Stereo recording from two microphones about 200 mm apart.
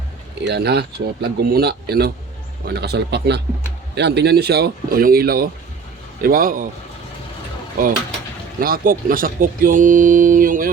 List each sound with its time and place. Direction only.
0.4 s a man's voice: 55° right (ahead or behind)
8.6 s speech: 45° right (ahead or behind)